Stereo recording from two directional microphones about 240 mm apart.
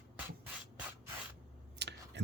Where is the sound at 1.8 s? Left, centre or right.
Right.